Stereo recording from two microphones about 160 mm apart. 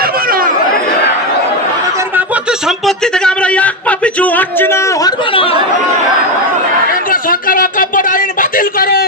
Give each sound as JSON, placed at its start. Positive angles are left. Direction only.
{"t": 0.0, "sound": "chatter", "side_deg": -65}
{"t": 2.0, "sound": "chuckle", "side_deg": -10}
{"t": 7.1, "sound": "a sound", "side_deg": 60}